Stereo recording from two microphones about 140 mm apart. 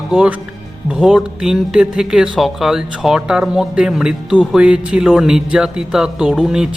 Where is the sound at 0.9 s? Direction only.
5° right (ahead or behind).